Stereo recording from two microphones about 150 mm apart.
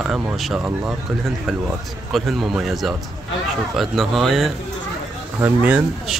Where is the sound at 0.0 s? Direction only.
5° right (ahead or behind).